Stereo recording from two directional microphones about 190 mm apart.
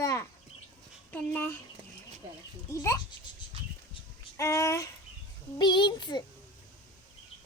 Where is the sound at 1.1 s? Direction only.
10° left (ahead or behind).